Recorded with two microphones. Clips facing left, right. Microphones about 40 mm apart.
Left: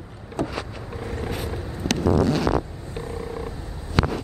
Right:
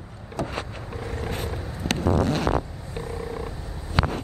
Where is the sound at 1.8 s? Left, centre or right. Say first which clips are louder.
Left 3 dB; right.